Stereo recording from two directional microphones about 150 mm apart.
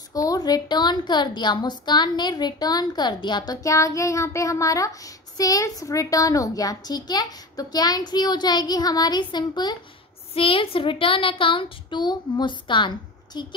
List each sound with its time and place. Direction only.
0.1 s a woman's voice: 25° left (ahead or behind)